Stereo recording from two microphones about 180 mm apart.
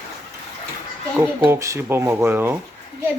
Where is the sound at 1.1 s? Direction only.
15° right (ahead or behind).